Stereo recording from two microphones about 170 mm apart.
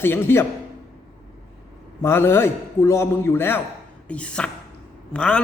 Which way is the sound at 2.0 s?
15° left (ahead or behind).